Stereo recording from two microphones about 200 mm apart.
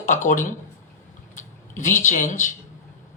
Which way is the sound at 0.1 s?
40° left (ahead or behind).